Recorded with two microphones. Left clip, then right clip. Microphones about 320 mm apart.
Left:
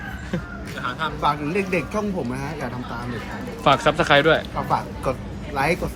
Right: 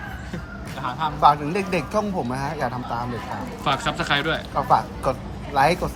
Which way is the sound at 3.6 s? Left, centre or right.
Centre.